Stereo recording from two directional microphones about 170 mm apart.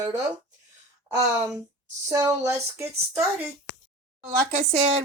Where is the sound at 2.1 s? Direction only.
20° right (ahead or behind).